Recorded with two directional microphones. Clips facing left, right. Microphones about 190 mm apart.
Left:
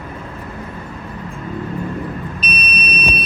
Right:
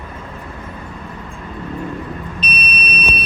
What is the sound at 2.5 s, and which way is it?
Vehicle, 30° right (ahead or behind).